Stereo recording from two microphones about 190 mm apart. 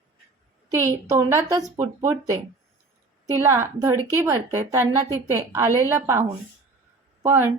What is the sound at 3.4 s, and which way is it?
A woman's voice, 15° right (ahead or behind).